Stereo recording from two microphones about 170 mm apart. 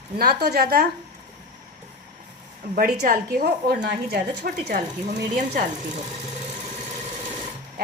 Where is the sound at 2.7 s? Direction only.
55° right (ahead or behind).